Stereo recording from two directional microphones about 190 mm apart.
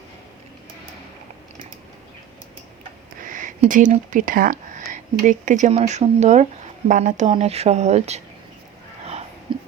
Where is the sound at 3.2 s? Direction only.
45° right (ahead or behind).